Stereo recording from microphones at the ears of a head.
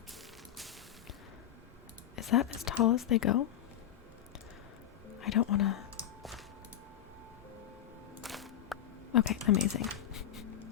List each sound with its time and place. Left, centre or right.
2.1 s a woman's voice: left
5.2 s a woman's voice: left
9.1 s speech: left